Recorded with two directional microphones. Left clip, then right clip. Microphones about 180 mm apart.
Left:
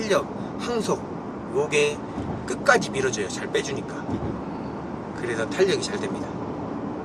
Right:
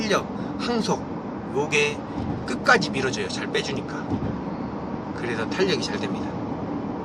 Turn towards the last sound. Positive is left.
turn(degrees=0)  # may be behind; listen again after turning